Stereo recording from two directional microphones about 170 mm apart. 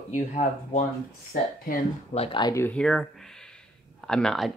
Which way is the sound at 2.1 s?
35° left (ahead or behind).